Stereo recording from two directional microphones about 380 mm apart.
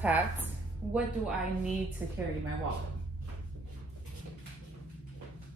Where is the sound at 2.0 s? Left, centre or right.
Centre.